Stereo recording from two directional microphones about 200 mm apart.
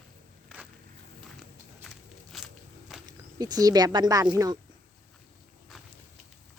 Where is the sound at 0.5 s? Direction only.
5° right (ahead or behind).